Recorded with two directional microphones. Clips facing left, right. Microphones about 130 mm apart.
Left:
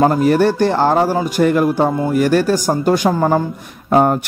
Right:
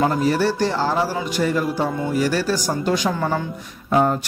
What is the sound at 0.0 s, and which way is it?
A man's voice, 50° left (ahead or behind).